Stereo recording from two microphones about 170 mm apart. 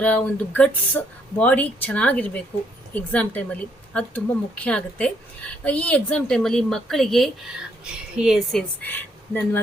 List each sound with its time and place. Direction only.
0.0 s a woman's voice: 10° left (ahead or behind)
8.8 s speech: 10° left (ahead or behind)